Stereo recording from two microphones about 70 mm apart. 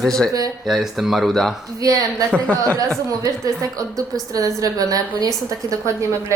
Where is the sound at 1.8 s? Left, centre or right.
Right.